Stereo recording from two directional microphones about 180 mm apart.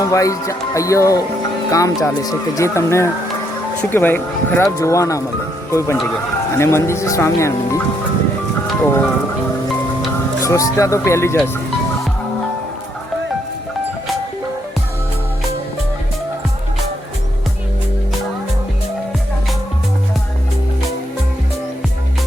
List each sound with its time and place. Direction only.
0.0 s speech: 20° left (ahead or behind)
6.6 s speech: 15° left (ahead or behind)
8.8 s speech: 10° left (ahead or behind)
10.4 s speech: 15° left (ahead or behind)